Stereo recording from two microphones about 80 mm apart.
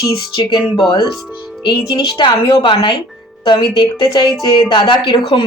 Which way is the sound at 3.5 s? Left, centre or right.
Left.